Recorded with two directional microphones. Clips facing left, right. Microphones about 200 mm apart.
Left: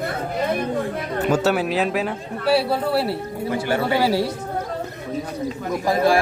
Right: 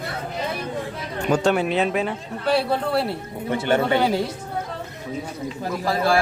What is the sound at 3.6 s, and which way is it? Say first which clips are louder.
Speech: right 3 dB; 25° right (ahead or behind).